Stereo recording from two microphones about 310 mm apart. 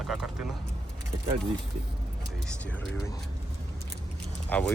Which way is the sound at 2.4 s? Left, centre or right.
Centre.